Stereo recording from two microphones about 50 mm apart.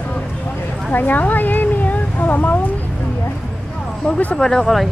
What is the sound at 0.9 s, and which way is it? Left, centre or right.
Speech, left.